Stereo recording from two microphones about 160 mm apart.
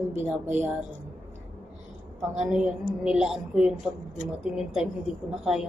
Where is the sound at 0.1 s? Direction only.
15° right (ahead or behind).